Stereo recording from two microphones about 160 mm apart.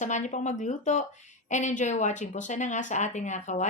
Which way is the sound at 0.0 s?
50° left (ahead or behind).